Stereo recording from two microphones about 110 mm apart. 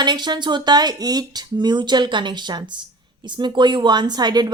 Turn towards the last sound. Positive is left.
turn(degrees=-40)  # may be behind; listen again after turning